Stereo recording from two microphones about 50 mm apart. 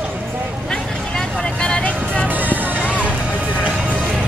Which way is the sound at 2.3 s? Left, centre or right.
Right.